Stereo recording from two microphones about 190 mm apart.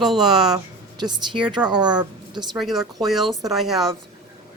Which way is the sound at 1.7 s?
20° right (ahead or behind).